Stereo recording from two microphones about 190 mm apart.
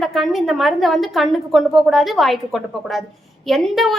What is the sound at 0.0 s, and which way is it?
A woman's voice, centre (ahead or behind).